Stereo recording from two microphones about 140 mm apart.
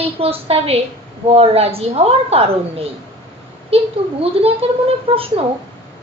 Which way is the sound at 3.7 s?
45° right (ahead or behind).